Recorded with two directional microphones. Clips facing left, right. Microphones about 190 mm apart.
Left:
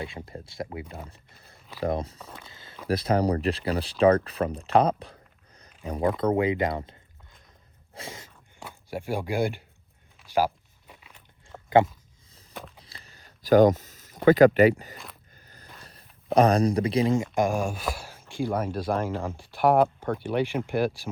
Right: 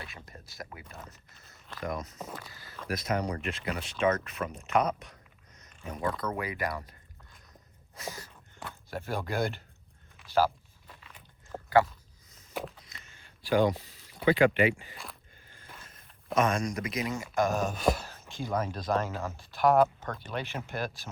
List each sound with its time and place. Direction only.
0.3 s speech: 30° left (ahead or behind)
5.5 s a sound: 30° left (ahead or behind)
6.1 s speech: 25° left (ahead or behind)
7.9 s speech: 25° left (ahead or behind)
8.9 s speech: 10° left (ahead or behind)
10.2 s walk: 15° left (ahead or behind)
11.5 s a sound: 30° right (ahead or behind)
12.3 s walk: 35° left (ahead or behind)
12.8 s a sound: 35° left (ahead or behind)
15.8 s speech: 35° left (ahead or behind)
17.3 s speech: 15° left (ahead or behind)